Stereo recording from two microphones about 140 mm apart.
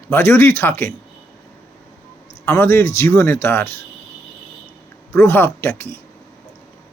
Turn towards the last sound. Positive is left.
turn(degrees=15)  # may be behind; listen again after turning